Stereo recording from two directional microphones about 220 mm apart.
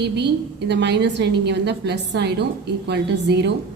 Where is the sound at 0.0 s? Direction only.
50° right (ahead or behind).